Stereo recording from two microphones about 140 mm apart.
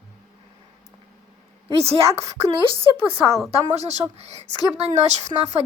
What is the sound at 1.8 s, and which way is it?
A woman's voice, 45° right (ahead or behind).